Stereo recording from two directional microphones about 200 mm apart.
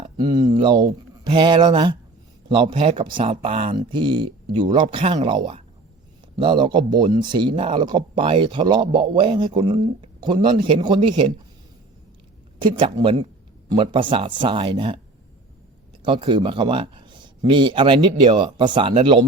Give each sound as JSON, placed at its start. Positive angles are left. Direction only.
{"t": 0.2, "sound": "speech", "side_deg": -20}
{"t": 12.5, "sound": "speech", "side_deg": -25}
{"t": 16.0, "sound": "speech", "side_deg": -25}